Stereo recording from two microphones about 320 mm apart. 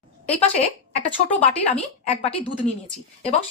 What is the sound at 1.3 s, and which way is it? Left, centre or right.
Speech, centre.